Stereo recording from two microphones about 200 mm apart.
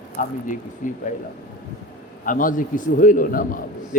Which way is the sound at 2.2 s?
40° left (ahead or behind).